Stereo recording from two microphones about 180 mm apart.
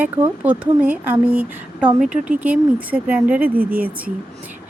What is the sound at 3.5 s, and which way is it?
Speech, 55° right (ahead or behind).